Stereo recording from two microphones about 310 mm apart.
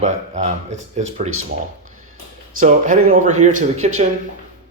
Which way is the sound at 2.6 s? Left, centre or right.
Right.